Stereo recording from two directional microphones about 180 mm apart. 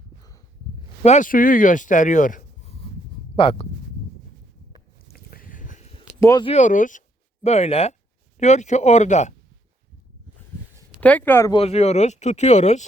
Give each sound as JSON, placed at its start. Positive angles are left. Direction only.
{"t": 1.0, "sound": "speech", "side_deg": 45}
{"t": 3.3, "sound": "speech", "side_deg": 30}
{"t": 5.1, "sound": "a sound", "side_deg": 55}
{"t": 6.1, "sound": "speech", "side_deg": 15}
{"t": 6.4, "sound": "speech", "side_deg": 40}
{"t": 11.0, "sound": "speech", "side_deg": 10}
{"t": 11.5, "sound": "speech", "side_deg": 35}